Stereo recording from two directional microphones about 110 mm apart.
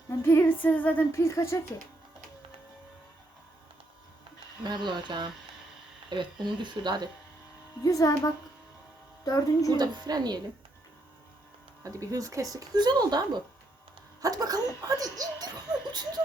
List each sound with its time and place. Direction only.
0.1 s female singing: 25° left (ahead or behind)
1.1 s speech: 25° left (ahead or behind)
4.6 s speech: 40° right (ahead or behind)
7.8 s speech: 30° left (ahead or behind)
9.7 s speech: 40° right (ahead or behind)
11.8 s speech: 30° right (ahead or behind)